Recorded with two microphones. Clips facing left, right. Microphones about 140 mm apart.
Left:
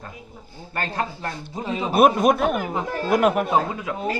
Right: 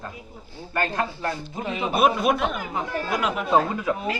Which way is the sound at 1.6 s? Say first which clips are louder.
Left 4 dB; 35° left (ahead or behind).